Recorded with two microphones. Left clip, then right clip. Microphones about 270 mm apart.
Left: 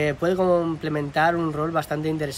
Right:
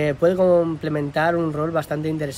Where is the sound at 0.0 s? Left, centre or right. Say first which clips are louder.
Right 4 dB; centre.